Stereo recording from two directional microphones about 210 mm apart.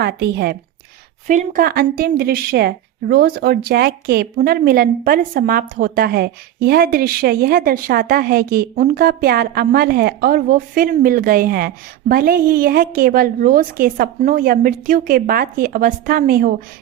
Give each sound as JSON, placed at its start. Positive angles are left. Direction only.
{"t": 0.0, "sound": "speech", "side_deg": -50}
{"t": 1.3, "sound": "speech", "side_deg": -40}